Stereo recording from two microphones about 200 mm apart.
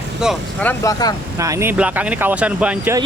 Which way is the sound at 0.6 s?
15° left (ahead or behind).